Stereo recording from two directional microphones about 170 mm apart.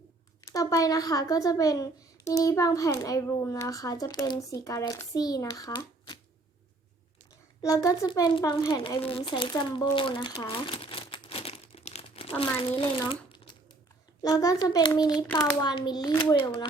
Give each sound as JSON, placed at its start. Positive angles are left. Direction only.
{"t": 0.5, "sound": "a child's voice", "side_deg": 20}
{"t": 7.6, "sound": "a child's voice", "side_deg": 20}
{"t": 9.0, "sound": "crumpling", "side_deg": 35}
{"t": 12.4, "sound": "a child's voice", "side_deg": 30}